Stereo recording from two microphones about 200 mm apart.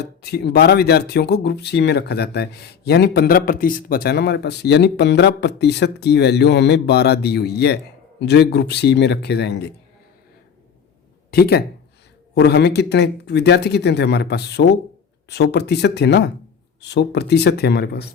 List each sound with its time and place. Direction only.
0.0 s speech: 55° left (ahead or behind)
11.3 s speech: 55° left (ahead or behind)